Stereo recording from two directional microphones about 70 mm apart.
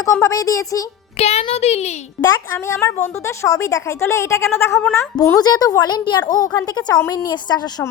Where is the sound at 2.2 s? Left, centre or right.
Left.